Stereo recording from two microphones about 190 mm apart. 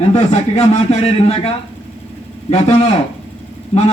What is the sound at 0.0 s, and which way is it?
A man's voice, 35° left (ahead or behind).